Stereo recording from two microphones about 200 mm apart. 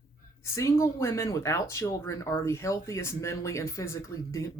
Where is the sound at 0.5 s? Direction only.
15° left (ahead or behind).